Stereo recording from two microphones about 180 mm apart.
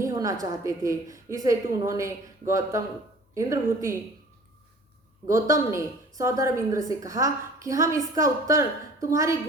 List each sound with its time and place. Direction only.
0.0 s a sound: 20° right (ahead or behind)
0.6 s a woman's voice: 15° right (ahead or behind)
5.3 s a woman's voice: 15° right (ahead or behind)